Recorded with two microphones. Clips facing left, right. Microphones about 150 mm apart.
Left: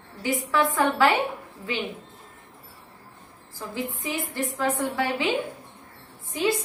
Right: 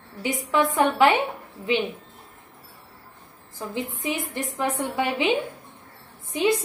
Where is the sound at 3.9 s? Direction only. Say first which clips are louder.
Right 1 dB; 20° right (ahead or behind).